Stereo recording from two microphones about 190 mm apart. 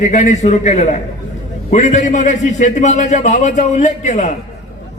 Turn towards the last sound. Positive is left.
turn(degrees=40)  # may be behind; listen again after turning